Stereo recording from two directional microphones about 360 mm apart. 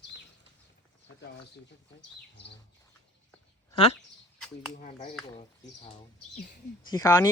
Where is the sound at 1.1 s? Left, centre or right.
Left.